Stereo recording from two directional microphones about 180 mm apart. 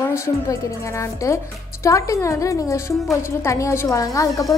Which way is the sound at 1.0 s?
15° left (ahead or behind).